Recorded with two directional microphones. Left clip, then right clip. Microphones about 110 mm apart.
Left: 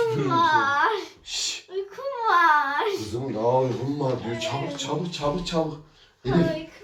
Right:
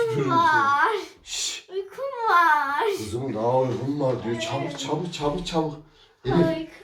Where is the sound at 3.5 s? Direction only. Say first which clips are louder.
Right 1 dB; 20° left (ahead or behind).